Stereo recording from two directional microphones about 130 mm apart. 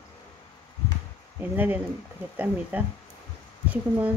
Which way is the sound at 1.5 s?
15° right (ahead or behind).